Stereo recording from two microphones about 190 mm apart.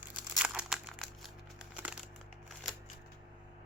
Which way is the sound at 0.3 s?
5° right (ahead or behind).